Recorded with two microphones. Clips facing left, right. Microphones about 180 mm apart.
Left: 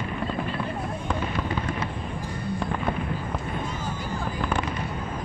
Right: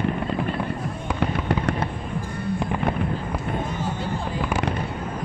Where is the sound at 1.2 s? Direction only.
70° right (ahead or behind).